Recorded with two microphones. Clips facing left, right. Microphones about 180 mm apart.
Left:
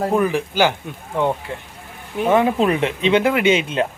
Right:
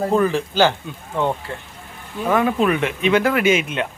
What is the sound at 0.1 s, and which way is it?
Speech, 15° left (ahead or behind).